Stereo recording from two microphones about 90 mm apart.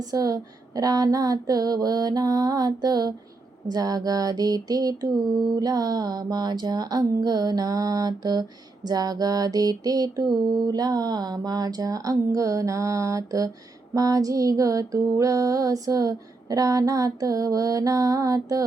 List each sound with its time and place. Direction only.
0.0 s mantra: 40° right (ahead or behind)
13.9 s music: 40° right (ahead or behind)